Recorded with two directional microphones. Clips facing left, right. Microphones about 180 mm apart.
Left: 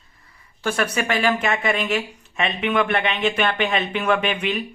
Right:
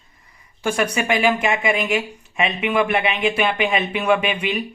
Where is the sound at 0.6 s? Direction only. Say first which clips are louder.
Right 2 dB; 10° right (ahead or behind).